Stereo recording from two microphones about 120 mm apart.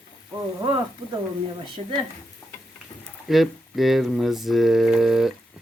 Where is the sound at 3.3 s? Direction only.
Centre (ahead or behind).